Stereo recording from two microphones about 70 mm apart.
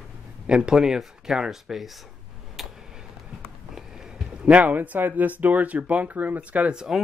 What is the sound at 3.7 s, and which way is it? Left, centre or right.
Speech, centre.